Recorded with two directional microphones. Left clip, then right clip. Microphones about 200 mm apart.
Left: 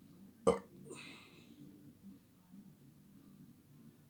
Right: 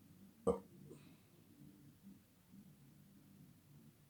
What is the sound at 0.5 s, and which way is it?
Burping, 25° left (ahead or behind).